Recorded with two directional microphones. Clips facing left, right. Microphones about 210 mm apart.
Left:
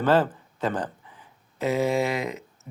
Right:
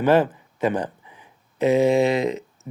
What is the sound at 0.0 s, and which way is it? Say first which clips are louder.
Speech: right 3 dB; 15° right (ahead or behind).